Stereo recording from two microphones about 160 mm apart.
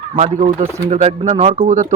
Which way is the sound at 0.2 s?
45° right (ahead or behind).